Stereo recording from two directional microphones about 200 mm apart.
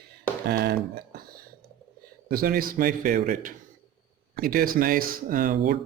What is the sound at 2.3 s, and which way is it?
Speech, 45° right (ahead or behind).